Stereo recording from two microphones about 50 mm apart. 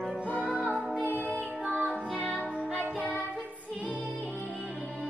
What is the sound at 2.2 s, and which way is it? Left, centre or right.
Music, left.